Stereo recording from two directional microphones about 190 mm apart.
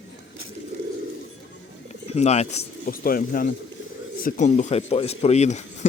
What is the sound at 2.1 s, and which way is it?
Speech, 35° left (ahead or behind).